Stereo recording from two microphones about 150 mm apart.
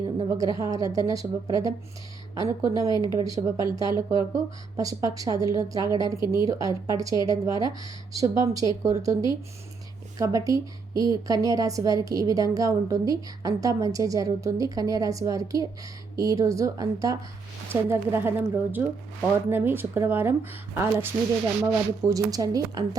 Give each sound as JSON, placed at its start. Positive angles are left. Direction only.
{"t": 0.3, "sound": "a woman's voice", "side_deg": -25}